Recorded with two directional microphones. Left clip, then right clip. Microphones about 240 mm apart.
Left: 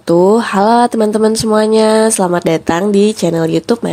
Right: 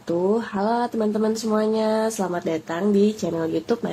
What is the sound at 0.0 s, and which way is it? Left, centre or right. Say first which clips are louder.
Speech: left 13 dB; left.